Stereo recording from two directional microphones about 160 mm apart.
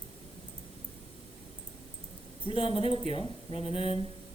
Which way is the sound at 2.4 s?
35° left (ahead or behind).